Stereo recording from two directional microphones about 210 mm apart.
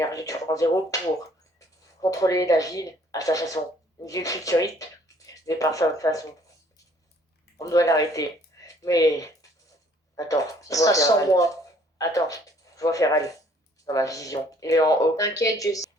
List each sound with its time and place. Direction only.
0.0 s speech: 15° left (ahead or behind)
7.6 s speech: 15° left (ahead or behind)